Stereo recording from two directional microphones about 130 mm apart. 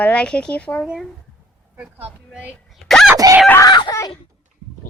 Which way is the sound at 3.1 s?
25° right (ahead or behind).